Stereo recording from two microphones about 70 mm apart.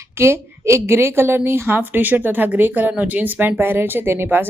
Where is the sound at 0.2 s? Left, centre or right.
Right.